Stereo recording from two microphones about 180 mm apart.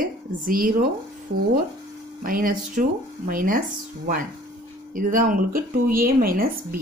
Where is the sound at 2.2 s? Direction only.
50° right (ahead or behind).